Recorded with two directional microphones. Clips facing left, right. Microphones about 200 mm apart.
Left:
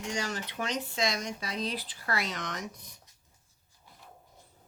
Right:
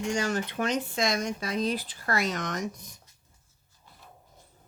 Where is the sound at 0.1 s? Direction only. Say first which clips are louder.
Right 5 dB; 50° right (ahead or behind).